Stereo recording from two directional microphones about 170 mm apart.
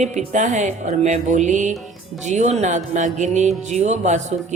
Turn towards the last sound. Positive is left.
turn(degrees=-45)  # may be behind; listen again after turning